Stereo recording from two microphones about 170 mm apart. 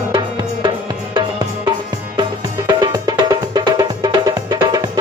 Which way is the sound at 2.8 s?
20° right (ahead or behind).